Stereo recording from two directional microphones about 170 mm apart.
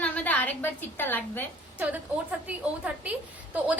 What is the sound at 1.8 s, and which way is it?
A woman's voice, 10° right (ahead or behind).